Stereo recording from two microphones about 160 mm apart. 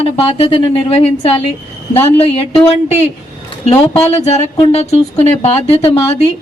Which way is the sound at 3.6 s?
40° left (ahead or behind).